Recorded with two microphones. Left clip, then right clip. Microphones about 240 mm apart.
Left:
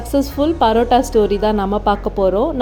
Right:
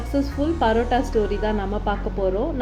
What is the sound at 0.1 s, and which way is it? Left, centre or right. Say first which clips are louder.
A woman's voice: left 7 dB; left.